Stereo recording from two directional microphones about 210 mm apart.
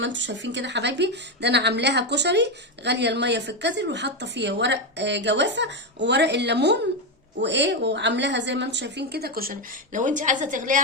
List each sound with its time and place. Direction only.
0.0 s a woman's voice: 60° right (ahead or behind); by 10.8 s 40° right (ahead or behind)